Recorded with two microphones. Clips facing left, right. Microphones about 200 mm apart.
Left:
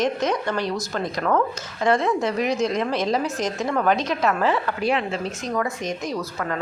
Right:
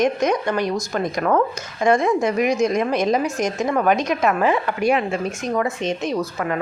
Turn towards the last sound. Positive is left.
turn(degrees=-15)  # may be behind; listen again after turning